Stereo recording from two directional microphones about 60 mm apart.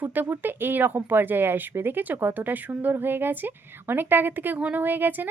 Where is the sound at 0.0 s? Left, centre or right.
Right.